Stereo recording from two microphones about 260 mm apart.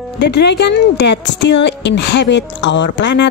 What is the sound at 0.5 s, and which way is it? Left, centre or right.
Speech, left.